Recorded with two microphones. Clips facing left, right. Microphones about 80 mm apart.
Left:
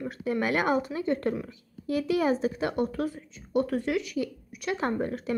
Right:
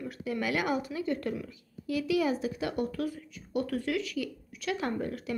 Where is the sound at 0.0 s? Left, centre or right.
Left.